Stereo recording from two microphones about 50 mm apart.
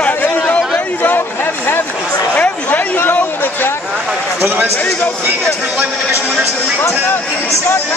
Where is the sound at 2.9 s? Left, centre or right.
Left.